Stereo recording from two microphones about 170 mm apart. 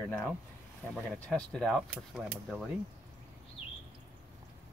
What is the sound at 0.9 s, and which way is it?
Speech, 5° left (ahead or behind).